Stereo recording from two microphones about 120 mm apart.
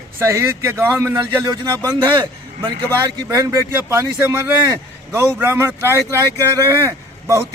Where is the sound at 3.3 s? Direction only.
25° right (ahead or behind).